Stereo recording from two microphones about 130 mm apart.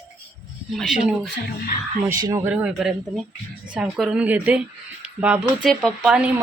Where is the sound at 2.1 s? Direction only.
25° right (ahead or behind).